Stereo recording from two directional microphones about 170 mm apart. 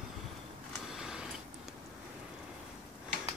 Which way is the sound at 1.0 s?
5° right (ahead or behind).